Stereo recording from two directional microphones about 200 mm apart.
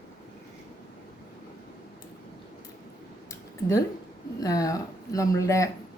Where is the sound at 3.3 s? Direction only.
15° left (ahead or behind).